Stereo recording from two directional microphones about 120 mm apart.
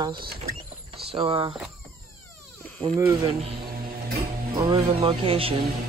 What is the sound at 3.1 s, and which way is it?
Speech, 45° right (ahead or behind).